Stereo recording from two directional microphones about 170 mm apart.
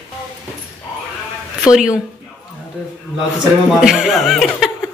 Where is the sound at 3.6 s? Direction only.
Centre (ahead or behind).